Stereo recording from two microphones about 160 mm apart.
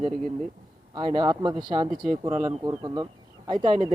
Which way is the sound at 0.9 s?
25° right (ahead or behind).